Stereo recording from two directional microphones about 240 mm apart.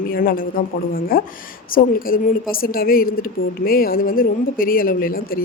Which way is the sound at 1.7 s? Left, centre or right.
Left.